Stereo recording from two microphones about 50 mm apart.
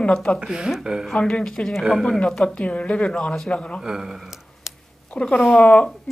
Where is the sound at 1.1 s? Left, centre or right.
Centre.